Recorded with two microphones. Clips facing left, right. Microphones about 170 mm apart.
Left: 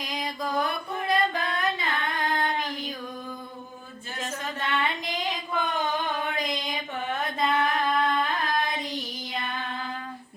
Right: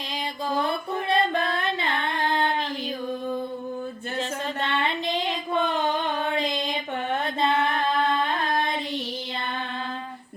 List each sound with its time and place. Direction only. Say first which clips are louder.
0.1 s music: right 2 dB; 30° right (ahead or behind)
4.2 s child singing: right 3 dB; 30° right (ahead or behind)
6.3 s mantra: right 4 dB; 30° right (ahead or behind)
7.4 s singing: right 1 dB; 30° right (ahead or behind)